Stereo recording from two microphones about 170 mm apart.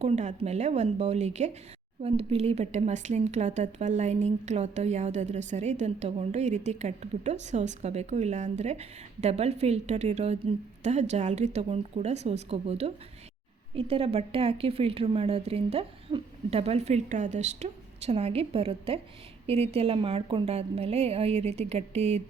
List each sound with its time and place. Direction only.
0.0 s speech: 40° right (ahead or behind)